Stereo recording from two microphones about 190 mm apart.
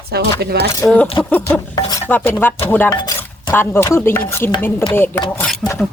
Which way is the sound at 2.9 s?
20° left (ahead or behind).